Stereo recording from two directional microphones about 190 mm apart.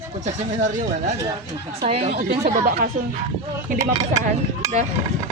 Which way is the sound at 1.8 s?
30° right (ahead or behind).